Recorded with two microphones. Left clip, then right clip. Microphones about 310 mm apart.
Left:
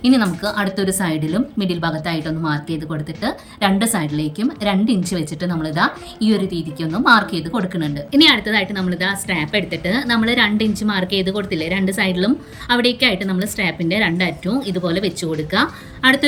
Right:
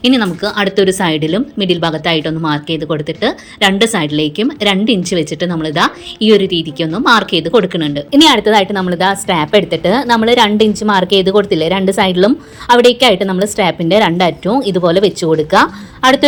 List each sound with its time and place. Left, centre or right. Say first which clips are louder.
0.0 s a woman's voice: right 4 dB; centre